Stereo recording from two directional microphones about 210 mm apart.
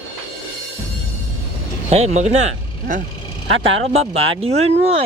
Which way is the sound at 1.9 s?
30° right (ahead or behind).